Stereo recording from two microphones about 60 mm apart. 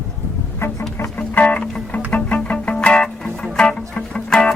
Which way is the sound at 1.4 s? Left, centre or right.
Left.